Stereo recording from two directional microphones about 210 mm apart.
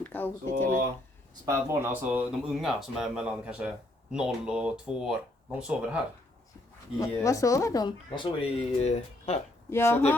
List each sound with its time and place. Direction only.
0.0 s a sound: 10° left (ahead or behind)
1.5 s speech: 15° right (ahead or behind)
7.0 s speech: 15° left (ahead or behind); by 9.4 s 30° left (ahead or behind)
9.6 s speech: 10° left (ahead or behind)